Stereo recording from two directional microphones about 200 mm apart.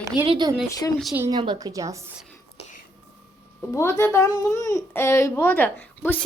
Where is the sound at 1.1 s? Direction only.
10° right (ahead or behind).